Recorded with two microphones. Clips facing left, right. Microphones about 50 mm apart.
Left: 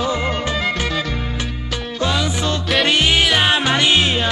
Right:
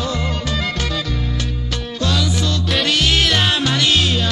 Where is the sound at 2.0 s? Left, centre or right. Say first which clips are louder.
Left 1 dB; left.